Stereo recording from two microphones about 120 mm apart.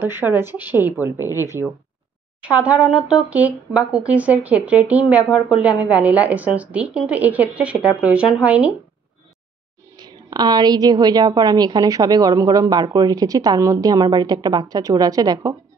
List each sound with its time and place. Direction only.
0.0 s speech: 20° right (ahead or behind)
2.4 s speech: 10° right (ahead or behind)
9.9 s a woman's voice: 35° right (ahead or behind)